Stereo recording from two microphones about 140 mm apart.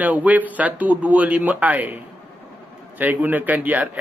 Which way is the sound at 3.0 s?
10° right (ahead or behind).